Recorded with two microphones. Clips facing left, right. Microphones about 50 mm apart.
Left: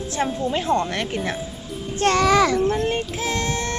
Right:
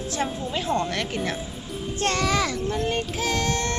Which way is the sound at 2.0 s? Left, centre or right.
Left.